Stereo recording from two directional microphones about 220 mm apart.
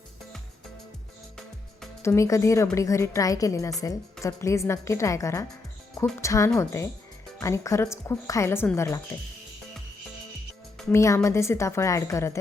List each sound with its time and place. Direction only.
2.0 s a woman's voice: 15° left (ahead or behind)
10.9 s a woman's voice: 15° left (ahead or behind)